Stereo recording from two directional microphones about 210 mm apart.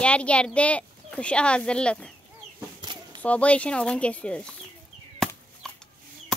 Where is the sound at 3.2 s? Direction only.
5° left (ahead or behind).